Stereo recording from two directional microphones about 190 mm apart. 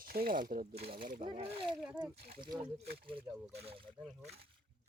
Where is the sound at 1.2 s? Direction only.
30° right (ahead or behind).